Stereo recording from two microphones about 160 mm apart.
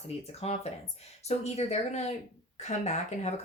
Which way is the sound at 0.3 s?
40° left (ahead or behind).